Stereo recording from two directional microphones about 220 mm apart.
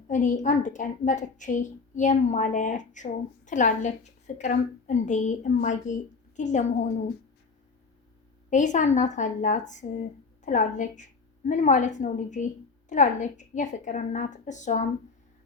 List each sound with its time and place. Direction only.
0.1 s speech: 35° left (ahead or behind)
8.4 s speech: 35° left (ahead or behind)